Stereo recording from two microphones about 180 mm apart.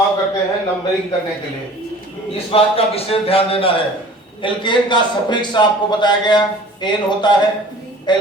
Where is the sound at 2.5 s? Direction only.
30° left (ahead or behind).